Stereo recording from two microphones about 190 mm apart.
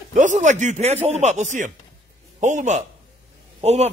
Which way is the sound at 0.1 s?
40° right (ahead or behind).